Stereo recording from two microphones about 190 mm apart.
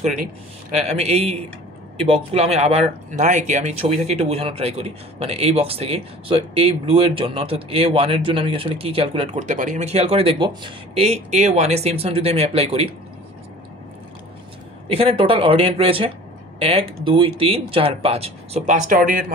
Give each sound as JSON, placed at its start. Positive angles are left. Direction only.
{"t": 0.7, "sound": "speech", "side_deg": -35}
{"t": 14.9, "sound": "speech", "side_deg": -30}